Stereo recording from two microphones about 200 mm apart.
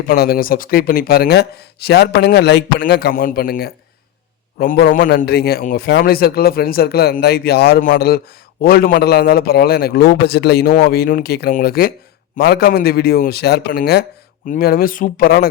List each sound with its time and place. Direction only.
0.1 s a man's voice: 45° left (ahead or behind)